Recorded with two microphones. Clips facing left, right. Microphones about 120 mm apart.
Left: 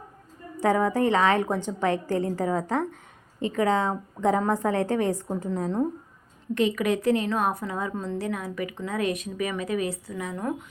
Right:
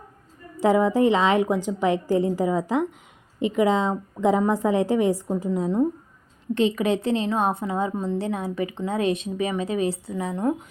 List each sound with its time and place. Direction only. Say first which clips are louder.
0.6 s a woman's voice: right 4 dB; 15° right (ahead or behind)
6.5 s a woman's voice: right 2 dB; 25° right (ahead or behind)